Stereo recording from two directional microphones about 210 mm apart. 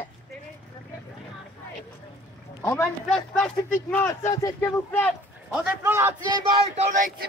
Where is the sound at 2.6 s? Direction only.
10° left (ahead or behind).